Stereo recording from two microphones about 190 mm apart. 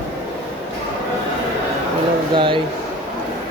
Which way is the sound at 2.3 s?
25° right (ahead or behind).